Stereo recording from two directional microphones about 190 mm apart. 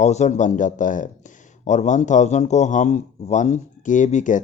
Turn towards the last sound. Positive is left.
turn(degrees=40)  # may be behind; listen again after turning